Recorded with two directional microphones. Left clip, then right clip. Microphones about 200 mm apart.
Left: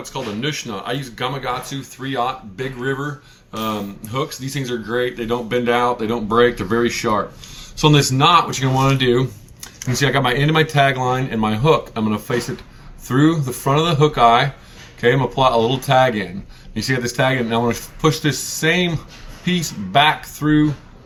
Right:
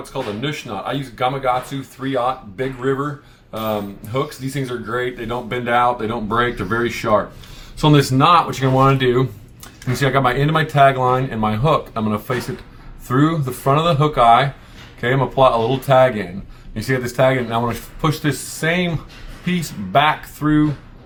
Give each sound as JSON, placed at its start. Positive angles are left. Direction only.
{"t": 0.0, "sound": "speech", "side_deg": -15}
{"t": 4.1, "sound": "speech", "side_deg": -20}